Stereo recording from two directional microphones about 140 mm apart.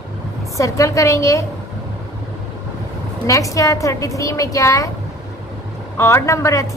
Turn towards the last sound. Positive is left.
turn(degrees=20)  # may be behind; listen again after turning